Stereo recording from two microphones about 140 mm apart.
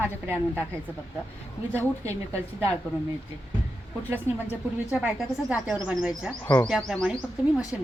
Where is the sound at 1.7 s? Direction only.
20° right (ahead or behind).